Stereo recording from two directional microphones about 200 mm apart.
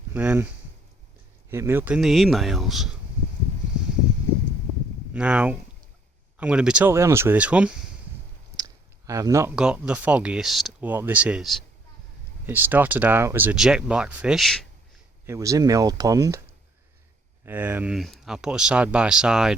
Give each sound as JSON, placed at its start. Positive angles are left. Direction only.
{"t": 0.1, "sound": "speech", "side_deg": -10}
{"t": 1.5, "sound": "speech", "side_deg": -10}
{"t": 5.1, "sound": "speech", "side_deg": -5}
{"t": 8.5, "sound": "a sound", "side_deg": -15}
{"t": 9.6, "sound": "speech", "side_deg": -5}
{"t": 15.3, "sound": "speech", "side_deg": -15}
{"t": 17.4, "sound": "speech", "side_deg": -10}